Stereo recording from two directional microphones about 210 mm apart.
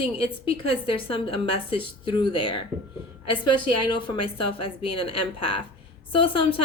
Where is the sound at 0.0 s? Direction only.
25° left (ahead or behind).